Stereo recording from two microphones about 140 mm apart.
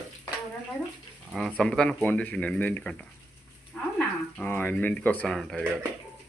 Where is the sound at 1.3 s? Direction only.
5° right (ahead or behind).